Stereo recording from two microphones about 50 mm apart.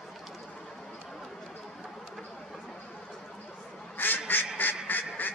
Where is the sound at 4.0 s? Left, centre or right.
Left.